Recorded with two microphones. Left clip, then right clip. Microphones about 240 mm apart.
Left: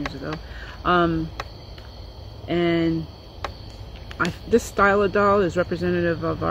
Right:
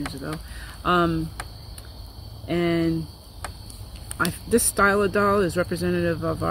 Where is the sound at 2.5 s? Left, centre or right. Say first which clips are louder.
Left 2 dB; centre.